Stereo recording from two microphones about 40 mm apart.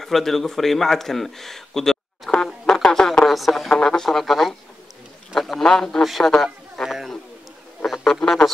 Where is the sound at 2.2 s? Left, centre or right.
Centre.